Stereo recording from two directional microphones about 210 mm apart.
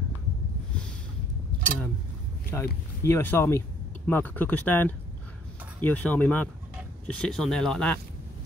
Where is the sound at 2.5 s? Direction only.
10° left (ahead or behind).